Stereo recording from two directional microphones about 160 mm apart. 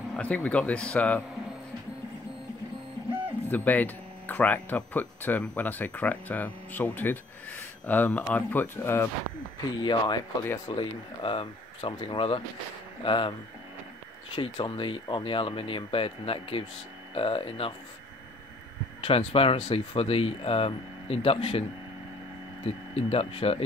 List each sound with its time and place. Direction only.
0.1 s speech: 10° left (ahead or behind)
3.4 s speech: 10° left (ahead or behind)
9.8 s speech: 30° left (ahead or behind)
14.3 s speech: 35° left (ahead or behind)
19.0 s speech: 35° left (ahead or behind)
22.7 s speech: 40° left (ahead or behind)